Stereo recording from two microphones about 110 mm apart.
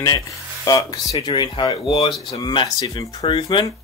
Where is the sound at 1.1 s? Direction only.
45° left (ahead or behind).